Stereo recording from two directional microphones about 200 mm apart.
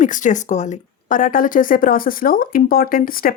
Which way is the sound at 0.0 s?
40° left (ahead or behind).